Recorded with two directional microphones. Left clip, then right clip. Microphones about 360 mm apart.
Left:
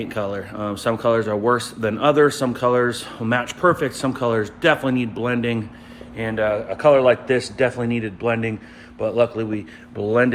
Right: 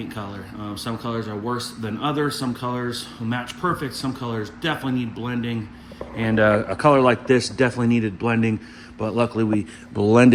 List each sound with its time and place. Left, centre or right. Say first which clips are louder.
0.0 s speech: left 8 dB; centre
6.1 s speech: right 3 dB; right
6.7 s speech: left 6 dB; centre